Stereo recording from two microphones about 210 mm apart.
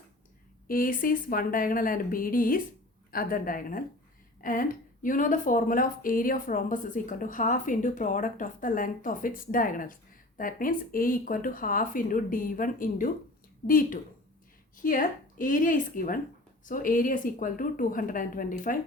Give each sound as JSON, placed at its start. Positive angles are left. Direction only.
{"t": 0.7, "sound": "speech", "side_deg": 40}
{"t": 4.4, "sound": "a sound", "side_deg": 40}
{"t": 5.0, "sound": "speech", "side_deg": 40}